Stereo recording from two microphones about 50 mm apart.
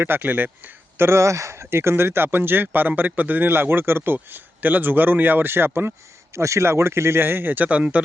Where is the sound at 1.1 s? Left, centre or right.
Right.